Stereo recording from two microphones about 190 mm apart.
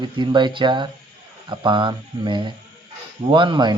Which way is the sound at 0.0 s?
25° right (ahead or behind).